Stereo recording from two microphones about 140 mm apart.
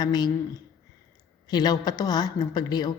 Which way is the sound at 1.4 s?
30° left (ahead or behind).